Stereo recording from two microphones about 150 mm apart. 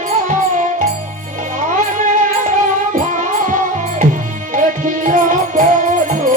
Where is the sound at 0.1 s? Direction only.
60° right (ahead or behind).